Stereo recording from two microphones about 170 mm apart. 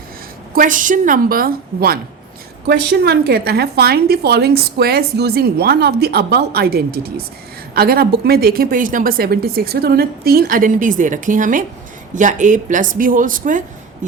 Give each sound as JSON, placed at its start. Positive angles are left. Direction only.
{"t": 0.5, "sound": "a woman's voice", "side_deg": -50}
{"t": 2.6, "sound": "a woman's voice", "side_deg": -75}